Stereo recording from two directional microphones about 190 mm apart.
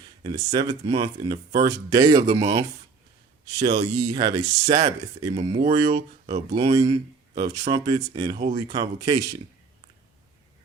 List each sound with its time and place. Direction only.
0.2 s speech: 20° right (ahead or behind)
5.3 s speech: 35° right (ahead or behind)
5.6 s speech: 20° right (ahead or behind)